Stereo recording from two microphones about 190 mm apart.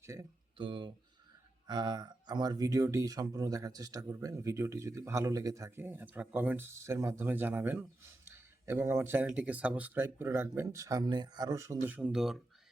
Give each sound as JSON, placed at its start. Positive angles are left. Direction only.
{"t": 0.0, "sound": "speech", "side_deg": -15}
{"t": 0.5, "sound": "speech", "side_deg": -25}